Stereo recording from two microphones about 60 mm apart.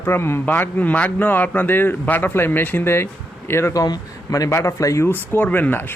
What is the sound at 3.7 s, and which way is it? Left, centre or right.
Speech, left.